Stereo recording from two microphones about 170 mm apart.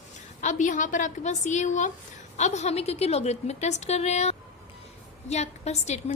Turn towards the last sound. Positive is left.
turn(degrees=40)  # may be behind; listen again after turning